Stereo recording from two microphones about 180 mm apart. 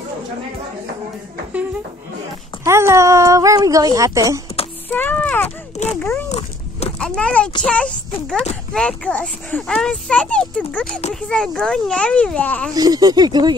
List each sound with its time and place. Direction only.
2.6 s speech: 15° right (ahead or behind)
4.9 s speech: 10° left (ahead or behind)
5.8 s a child's voice: 40° left (ahead or behind)
6.2 s a sound: 35° left (ahead or behind)
7.0 s speech: 5° left (ahead or behind)
12.7 s speech: 20° right (ahead or behind)